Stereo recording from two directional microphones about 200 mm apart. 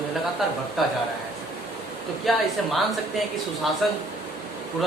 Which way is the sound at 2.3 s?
Centre (ahead or behind).